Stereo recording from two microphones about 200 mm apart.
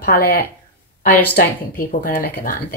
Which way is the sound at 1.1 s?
10° left (ahead or behind).